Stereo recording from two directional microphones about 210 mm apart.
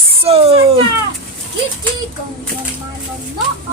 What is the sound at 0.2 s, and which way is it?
Speech, 30° right (ahead or behind).